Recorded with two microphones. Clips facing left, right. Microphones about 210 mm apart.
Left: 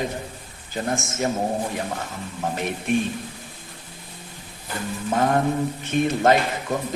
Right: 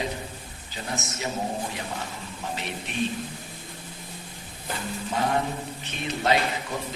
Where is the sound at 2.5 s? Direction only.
50° left (ahead or behind).